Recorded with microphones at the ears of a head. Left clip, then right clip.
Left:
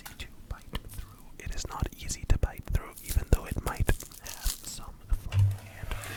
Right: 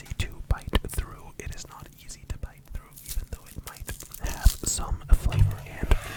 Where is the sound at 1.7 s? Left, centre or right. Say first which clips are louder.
Left 7 dB; left.